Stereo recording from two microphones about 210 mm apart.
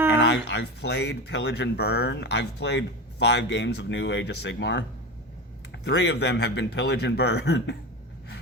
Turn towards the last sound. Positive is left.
turn(degrees=55)  # may be behind; listen again after turning